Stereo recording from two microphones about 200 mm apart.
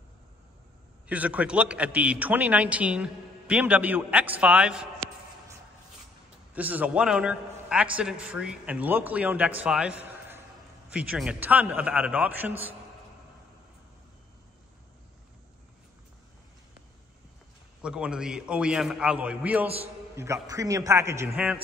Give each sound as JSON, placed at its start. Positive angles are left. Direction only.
{"t": 1.0, "sound": "a man's voice", "side_deg": -5}
{"t": 6.5, "sound": "a man's voice", "side_deg": -10}
{"t": 17.8, "sound": "a man's voice", "side_deg": -5}